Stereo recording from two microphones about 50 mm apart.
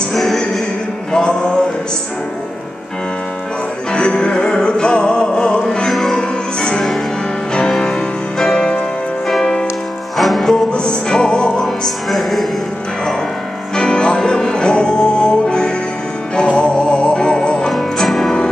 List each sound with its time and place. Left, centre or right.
0.1 s music: centre
1.1 s music: centre
3.9 s music: centre
5.9 s music: centre
7.5 s music: centre
10.1 s music: centre
10.7 s music: centre
13.7 s music: centre
17.7 s music: centre